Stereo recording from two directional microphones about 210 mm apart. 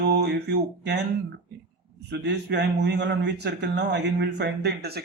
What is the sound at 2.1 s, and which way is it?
A man's voice, 55° right (ahead or behind).